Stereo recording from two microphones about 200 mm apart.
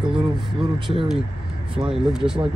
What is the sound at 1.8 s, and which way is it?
Speech, 5° right (ahead or behind).